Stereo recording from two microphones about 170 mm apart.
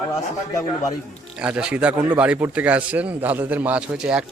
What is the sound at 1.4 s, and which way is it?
A man's voice, 5° right (ahead or behind).